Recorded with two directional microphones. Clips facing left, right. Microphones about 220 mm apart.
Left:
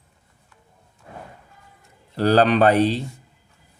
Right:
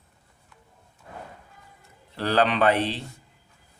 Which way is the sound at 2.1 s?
40° left (ahead or behind).